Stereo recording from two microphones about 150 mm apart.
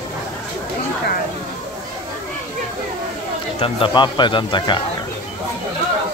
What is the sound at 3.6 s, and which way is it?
Speech, 30° left (ahead or behind).